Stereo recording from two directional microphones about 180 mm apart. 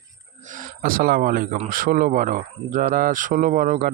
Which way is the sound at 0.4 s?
50° right (ahead or behind).